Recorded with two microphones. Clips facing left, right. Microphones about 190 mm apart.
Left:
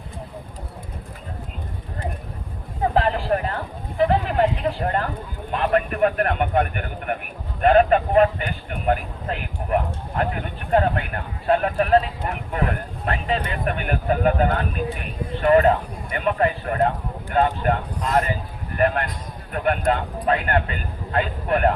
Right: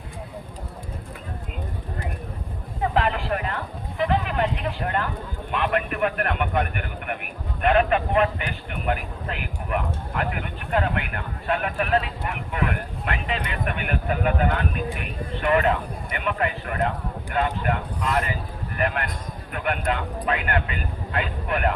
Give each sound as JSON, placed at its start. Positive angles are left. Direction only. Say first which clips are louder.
{"t": 2.9, "sound": "speech", "louder": "left 4 dB", "side_deg": 35}